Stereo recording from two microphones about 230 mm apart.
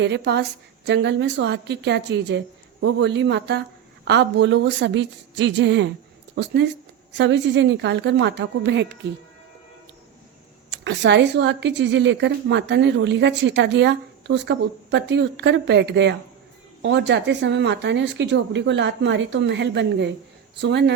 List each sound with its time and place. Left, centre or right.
0.0 s a woman's voice: right
10.7 s a woman's voice: right